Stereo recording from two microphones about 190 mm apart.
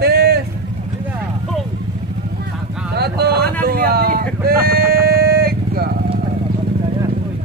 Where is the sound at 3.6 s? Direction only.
55° right (ahead or behind).